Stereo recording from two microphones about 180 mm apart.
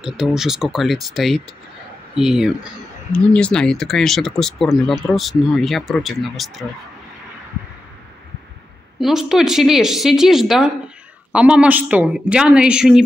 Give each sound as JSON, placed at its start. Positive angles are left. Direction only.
{"t": 0.0, "sound": "speech", "side_deg": 0}
{"t": 9.0, "sound": "a woman's voice", "side_deg": 0}